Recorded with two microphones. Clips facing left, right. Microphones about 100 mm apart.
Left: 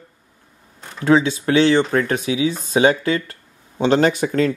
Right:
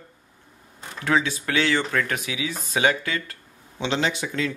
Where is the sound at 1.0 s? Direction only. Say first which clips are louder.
Left 8 dB; 30° left (ahead or behind); by 4.5 s 45° left (ahead or behind).